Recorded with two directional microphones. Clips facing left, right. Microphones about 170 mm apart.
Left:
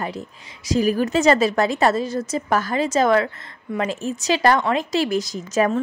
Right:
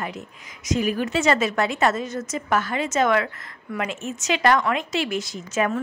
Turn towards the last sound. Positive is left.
turn(degrees=35)  # may be behind; listen again after turning